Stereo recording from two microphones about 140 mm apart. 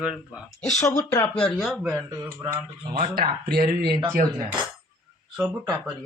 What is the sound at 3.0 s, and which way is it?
Speech, 90° right.